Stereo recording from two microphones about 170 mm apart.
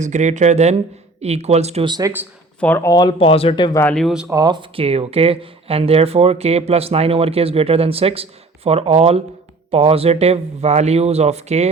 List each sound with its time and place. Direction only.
0.0 s speech: 45° right (ahead or behind)
1.9 s speech: 20° right (ahead or behind)
2.6 s speech: 10° left (ahead or behind); by 3.8 s 25° left (ahead or behind)
3.8 s speech: 5° left (ahead or behind)
4.3 s speech: 25° right (ahead or behind); by 11.7 s 40° right (ahead or behind)